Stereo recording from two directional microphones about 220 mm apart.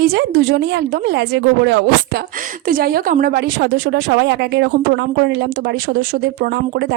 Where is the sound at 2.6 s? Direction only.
40° right (ahead or behind).